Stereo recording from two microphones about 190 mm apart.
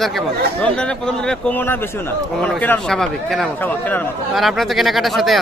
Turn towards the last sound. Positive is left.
turn(degrees=0)  # may be behind; listen again after turning